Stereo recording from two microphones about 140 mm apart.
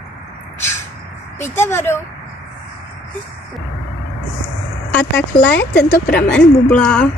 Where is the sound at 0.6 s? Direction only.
15° left (ahead or behind).